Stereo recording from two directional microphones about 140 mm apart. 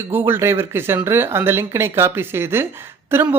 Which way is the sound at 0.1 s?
15° right (ahead or behind).